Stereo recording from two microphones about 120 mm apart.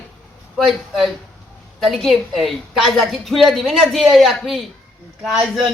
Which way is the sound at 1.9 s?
Centre (ahead or behind).